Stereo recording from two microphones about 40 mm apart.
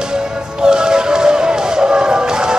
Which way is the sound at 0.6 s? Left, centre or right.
Centre.